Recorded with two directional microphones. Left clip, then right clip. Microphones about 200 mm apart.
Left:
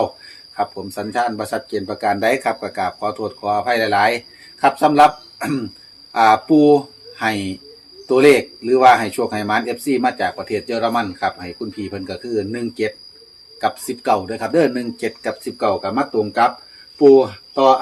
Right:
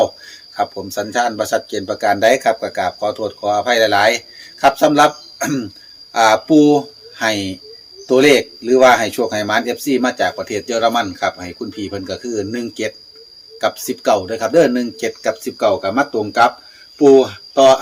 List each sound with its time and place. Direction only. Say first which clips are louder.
0.5 s speech: right 3 dB; 25° right (ahead or behind)